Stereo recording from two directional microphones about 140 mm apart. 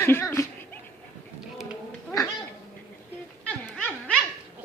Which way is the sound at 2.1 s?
20° left (ahead or behind).